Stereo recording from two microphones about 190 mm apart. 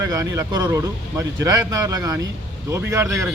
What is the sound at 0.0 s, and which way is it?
Speech, 15° right (ahead or behind).